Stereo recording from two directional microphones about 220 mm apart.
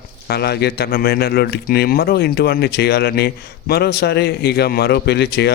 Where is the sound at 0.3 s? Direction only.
45° left (ahead or behind).